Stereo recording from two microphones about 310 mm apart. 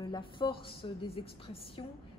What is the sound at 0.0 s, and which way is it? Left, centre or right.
A woman's voice, centre.